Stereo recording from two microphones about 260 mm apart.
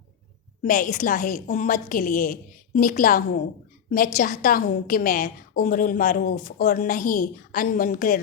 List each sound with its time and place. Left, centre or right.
0.6 s a woman's voice: left